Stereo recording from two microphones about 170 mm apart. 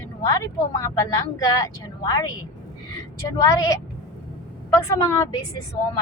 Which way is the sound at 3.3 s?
20° left (ahead or behind).